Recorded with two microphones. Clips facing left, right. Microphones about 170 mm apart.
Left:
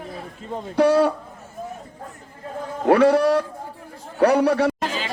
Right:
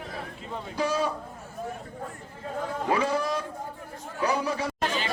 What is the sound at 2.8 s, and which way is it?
A man's voice, 65° left (ahead or behind).